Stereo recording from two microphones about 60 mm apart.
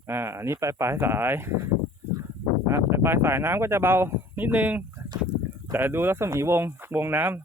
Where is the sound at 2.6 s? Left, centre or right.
Right.